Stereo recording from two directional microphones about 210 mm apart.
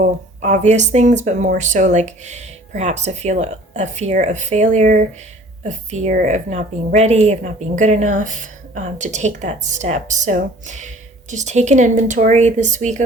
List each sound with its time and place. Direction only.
0.0 s a woman's voice: 35° right (ahead or behind)